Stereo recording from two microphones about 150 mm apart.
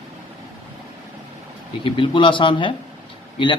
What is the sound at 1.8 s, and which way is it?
Speech, 35° left (ahead or behind).